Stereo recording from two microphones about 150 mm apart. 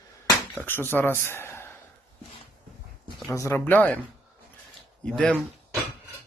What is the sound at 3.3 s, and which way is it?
Speech, 20° left (ahead or behind).